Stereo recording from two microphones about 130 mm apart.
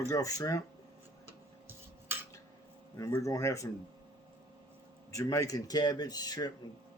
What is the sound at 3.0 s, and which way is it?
Speech, 25° left (ahead or behind).